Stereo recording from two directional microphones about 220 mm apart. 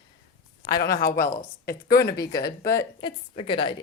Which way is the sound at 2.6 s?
15° left (ahead or behind).